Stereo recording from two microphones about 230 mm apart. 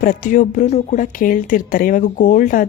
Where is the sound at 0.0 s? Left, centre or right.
Left.